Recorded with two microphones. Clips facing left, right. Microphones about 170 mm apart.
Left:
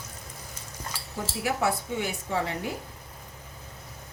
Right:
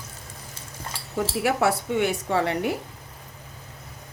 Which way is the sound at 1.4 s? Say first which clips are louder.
Right 4 dB; 70° right (ahead or behind).